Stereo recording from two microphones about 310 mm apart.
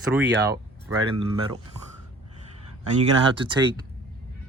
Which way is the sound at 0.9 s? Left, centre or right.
Centre.